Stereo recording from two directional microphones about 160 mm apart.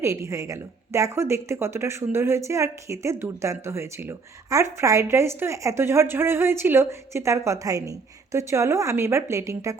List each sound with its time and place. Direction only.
0.0 s speech: 20° right (ahead or behind)